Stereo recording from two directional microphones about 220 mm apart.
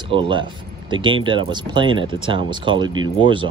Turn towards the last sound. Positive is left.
turn(degrees=-20)  # may be behind; listen again after turning